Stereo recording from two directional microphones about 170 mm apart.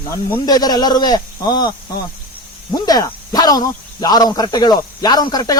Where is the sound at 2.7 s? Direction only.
20° left (ahead or behind).